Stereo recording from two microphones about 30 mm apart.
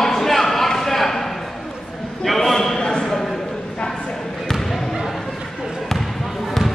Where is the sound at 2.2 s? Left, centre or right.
Centre.